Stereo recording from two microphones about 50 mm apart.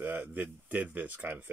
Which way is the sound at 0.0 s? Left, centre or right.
Right.